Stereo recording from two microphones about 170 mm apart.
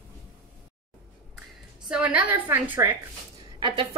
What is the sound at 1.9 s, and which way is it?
Speech, 10° right (ahead or behind).